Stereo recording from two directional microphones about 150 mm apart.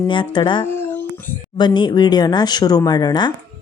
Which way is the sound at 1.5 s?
30° left (ahead or behind).